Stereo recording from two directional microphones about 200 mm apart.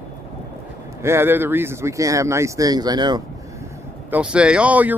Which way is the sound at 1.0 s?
10° right (ahead or behind).